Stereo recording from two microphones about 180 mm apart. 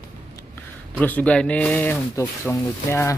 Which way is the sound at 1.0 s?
10° left (ahead or behind).